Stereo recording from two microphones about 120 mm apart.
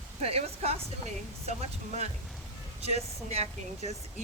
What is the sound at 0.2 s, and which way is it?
Speech, 60° right (ahead or behind).